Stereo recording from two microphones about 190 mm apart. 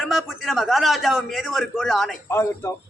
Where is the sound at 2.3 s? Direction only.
15° left (ahead or behind).